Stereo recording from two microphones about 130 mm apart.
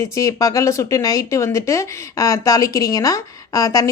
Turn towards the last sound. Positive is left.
turn(degrees=25)  # may be behind; listen again after turning